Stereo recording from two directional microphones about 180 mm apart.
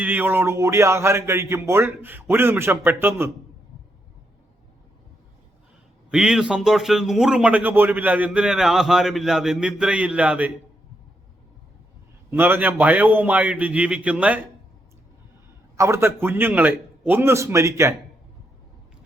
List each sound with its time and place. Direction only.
0.0 s a man's voice: 10° right (ahead or behind)
6.1 s a man's voice: 5° right (ahead or behind)
12.3 s a man's voice: 10° right (ahead or behind)
15.8 s a man's voice: 15° right (ahead or behind)